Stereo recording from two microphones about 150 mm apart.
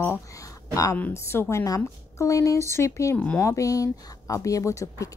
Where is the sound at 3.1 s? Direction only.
10° left (ahead or behind).